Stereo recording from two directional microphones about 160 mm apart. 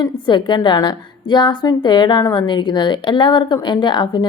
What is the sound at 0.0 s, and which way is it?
A woman's voice, 30° left (ahead or behind).